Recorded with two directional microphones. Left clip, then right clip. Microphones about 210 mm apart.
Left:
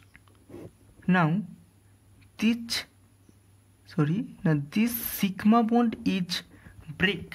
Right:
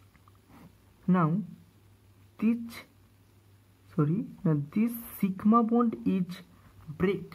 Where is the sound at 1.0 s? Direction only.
15° left (ahead or behind).